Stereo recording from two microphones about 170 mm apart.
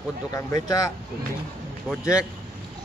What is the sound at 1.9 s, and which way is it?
Speech, 5° right (ahead or behind).